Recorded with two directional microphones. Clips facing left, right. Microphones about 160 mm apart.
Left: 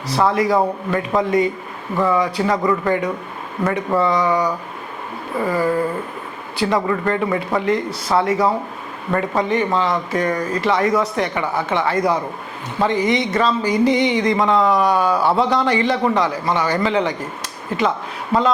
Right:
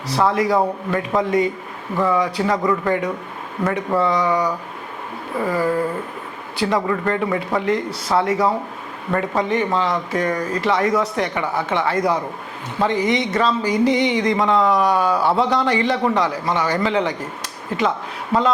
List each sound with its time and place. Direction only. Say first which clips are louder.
0.1 s speech: left 1 dB; 10° left (ahead or behind)
5.3 s a sound: left 1 dB; 20° left (ahead or behind)
6.6 s speech: left 1 dB; 15° left (ahead or behind)